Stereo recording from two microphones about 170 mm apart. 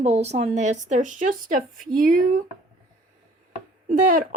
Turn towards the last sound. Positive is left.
turn(degrees=-55)  # may be behind; listen again after turning